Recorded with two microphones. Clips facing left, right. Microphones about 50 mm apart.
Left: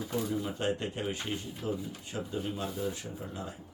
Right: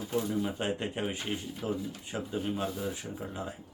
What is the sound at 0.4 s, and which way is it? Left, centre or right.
Speech, centre.